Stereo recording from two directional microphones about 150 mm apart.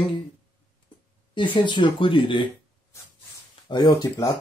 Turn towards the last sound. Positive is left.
turn(degrees=25)  # may be behind; listen again after turning